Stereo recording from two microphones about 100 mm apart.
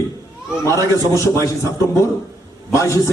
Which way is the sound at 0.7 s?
35° right (ahead or behind).